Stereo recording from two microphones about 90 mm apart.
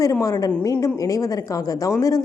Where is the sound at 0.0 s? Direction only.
40° left (ahead or behind).